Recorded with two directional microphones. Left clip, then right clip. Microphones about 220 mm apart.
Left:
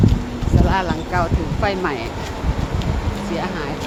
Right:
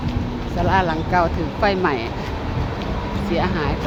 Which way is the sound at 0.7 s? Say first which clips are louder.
Right 5 dB; 15° right (ahead or behind).